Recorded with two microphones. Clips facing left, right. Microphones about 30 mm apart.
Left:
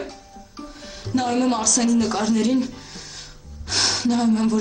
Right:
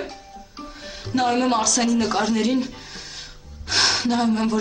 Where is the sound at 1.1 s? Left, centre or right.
Centre.